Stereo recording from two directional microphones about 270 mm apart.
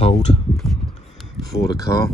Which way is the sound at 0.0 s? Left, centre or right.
Left.